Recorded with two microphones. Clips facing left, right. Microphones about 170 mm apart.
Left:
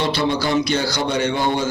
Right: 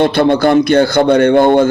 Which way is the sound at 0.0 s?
55° right (ahead or behind).